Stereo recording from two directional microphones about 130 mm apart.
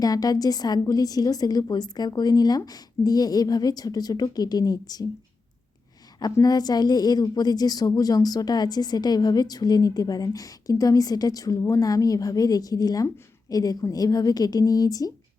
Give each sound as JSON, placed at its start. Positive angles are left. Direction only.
{"t": 0.0, "sound": "a woman's voice", "side_deg": 30}
{"t": 6.1, "sound": "a woman's voice", "side_deg": 30}